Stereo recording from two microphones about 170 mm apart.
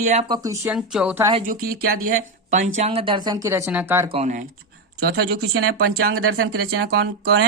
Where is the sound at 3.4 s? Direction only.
15° right (ahead or behind).